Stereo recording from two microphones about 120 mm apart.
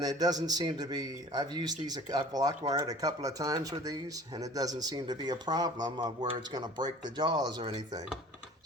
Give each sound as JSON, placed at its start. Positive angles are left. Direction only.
{"t": 0.0, "sound": "speech", "side_deg": -35}